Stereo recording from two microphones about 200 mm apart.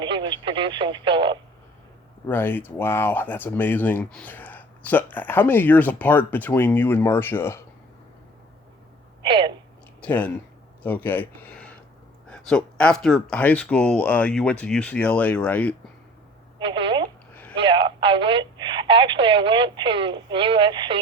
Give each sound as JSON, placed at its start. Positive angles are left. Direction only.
{"t": 0.0, "sound": "radio", "side_deg": -25}
{"t": 2.2, "sound": "speech", "side_deg": 10}
{"t": 9.2, "sound": "a sound", "side_deg": -25}
{"t": 10.0, "sound": "speech", "side_deg": 5}
{"t": 16.6, "sound": "a sound", "side_deg": -25}
{"t": 17.6, "sound": "speech", "side_deg": -25}